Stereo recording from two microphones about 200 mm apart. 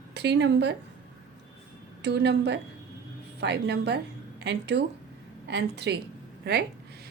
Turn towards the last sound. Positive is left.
turn(degrees=-55)  # may be behind; listen again after turning